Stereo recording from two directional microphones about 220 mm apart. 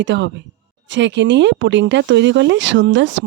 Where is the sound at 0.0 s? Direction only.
55° right (ahead or behind).